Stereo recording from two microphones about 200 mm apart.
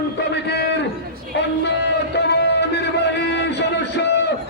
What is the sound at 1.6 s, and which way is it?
Music, 60° left (ahead or behind).